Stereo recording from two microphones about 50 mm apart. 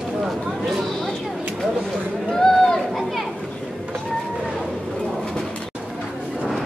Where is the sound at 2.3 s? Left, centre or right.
Centre.